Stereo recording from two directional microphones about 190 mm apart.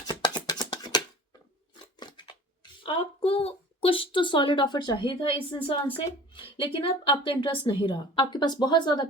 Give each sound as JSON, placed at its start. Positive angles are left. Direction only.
{"t": 0.1, "sound": "a sound", "side_deg": 20}
{"t": 2.0, "sound": "scissors", "side_deg": 25}
{"t": 2.8, "sound": "speech", "side_deg": 30}